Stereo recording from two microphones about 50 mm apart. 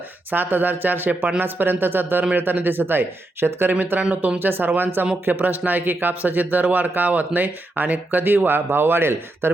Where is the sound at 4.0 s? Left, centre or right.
Right.